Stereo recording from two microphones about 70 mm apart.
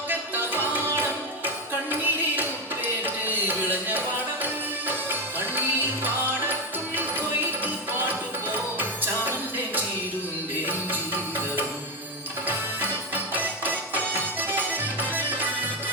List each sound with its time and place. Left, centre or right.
0.1 s music: right
5.0 s music: right
6.9 s music: right
13.3 s music: right